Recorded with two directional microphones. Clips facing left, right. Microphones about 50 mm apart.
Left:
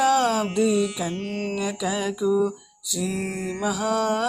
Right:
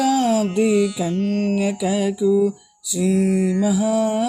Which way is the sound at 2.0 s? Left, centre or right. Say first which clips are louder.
Right 4 dB; centre.